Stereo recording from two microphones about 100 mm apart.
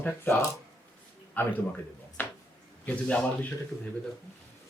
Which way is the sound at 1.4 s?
15° left (ahead or behind).